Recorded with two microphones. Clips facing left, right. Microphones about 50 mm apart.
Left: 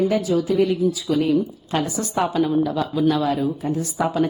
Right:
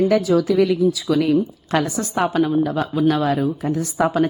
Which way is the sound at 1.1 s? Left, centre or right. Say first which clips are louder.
Right 2 dB; right.